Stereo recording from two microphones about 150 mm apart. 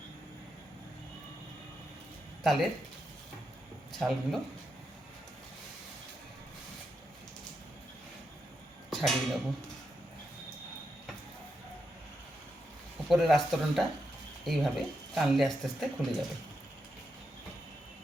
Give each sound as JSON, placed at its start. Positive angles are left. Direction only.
{"t": 2.4, "sound": "speech", "side_deg": 0}
{"t": 3.9, "sound": "speech", "side_deg": 0}
{"t": 8.9, "sound": "speech", "side_deg": 0}
{"t": 13.1, "sound": "speech", "side_deg": 0}